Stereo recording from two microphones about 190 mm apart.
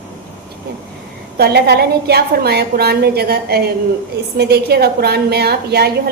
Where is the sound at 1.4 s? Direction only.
60° right (ahead or behind).